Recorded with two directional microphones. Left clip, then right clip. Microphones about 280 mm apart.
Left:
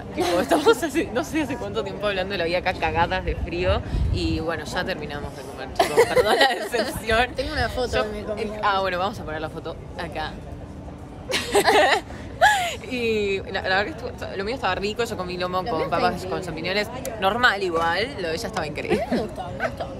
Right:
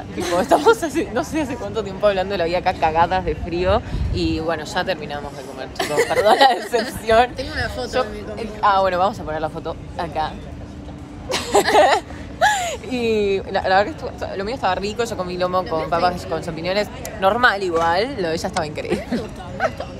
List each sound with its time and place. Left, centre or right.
0.4 s speech: centre
3.3 s speech: centre
5.8 s speech: left
6.2 s speech: centre
7.3 s speech: left
7.9 s speech: centre
11.2 s a sound: centre
12.9 s speech: centre
17.9 s speech: centre
18.6 s a woman's voice: centre